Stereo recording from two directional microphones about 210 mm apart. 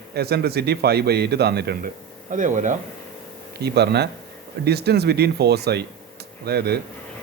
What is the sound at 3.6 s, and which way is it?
Speech, 50° right (ahead or behind).